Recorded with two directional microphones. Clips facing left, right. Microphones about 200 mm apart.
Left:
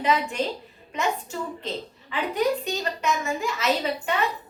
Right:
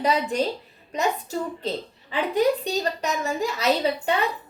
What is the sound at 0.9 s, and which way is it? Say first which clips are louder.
A woman's voice: right 2 dB; 35° right (ahead or behind).